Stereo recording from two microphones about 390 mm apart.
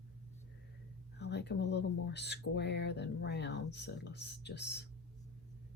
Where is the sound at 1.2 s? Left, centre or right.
Left.